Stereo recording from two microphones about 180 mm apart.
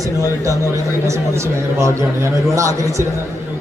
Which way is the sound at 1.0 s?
15° right (ahead or behind).